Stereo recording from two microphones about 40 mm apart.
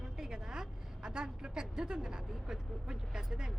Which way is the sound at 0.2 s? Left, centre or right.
Centre.